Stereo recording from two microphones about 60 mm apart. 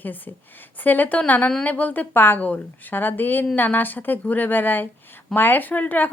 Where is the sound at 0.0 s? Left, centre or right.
Left.